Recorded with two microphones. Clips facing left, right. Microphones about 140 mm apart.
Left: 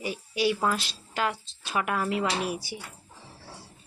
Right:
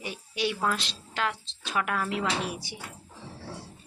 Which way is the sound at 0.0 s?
5° left (ahead or behind).